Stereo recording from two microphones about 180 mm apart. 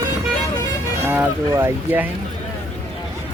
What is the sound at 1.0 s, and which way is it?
Speech, 10° right (ahead or behind).